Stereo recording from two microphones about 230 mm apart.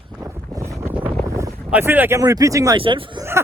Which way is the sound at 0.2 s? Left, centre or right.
Centre.